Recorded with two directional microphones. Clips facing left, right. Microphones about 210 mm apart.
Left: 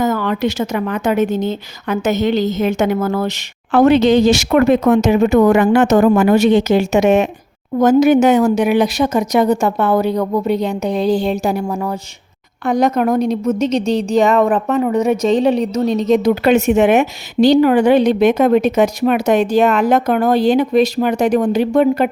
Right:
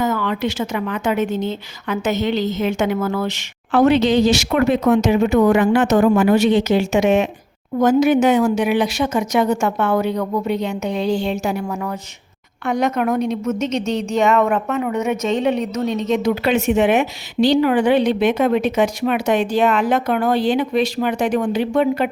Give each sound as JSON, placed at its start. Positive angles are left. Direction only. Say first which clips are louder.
{"t": 0.0, "sound": "a woman's voice", "louder": "left 3 dB", "side_deg": 40}